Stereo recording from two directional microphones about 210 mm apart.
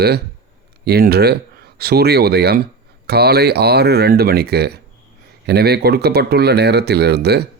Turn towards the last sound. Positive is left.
turn(degrees=-50)  # may be behind; listen again after turning